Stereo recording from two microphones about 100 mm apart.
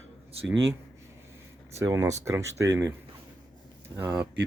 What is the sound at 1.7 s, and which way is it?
Speech, 30° right (ahead or behind).